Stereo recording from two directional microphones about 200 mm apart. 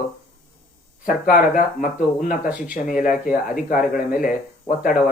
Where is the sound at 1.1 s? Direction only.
40° left (ahead or behind).